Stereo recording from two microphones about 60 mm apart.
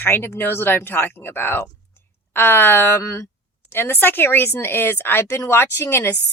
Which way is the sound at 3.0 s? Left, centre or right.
Left.